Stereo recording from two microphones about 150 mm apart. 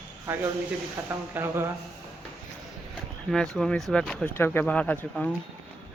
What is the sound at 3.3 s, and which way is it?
Speech, centre (ahead or behind).